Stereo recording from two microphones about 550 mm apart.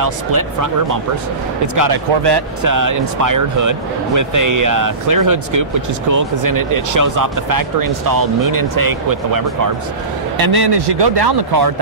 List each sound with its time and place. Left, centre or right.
0.0 s speech: right
1.8 s speech: right